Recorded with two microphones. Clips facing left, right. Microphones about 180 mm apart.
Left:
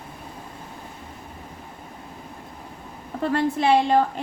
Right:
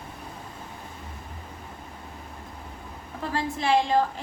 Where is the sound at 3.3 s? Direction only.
60° left (ahead or behind).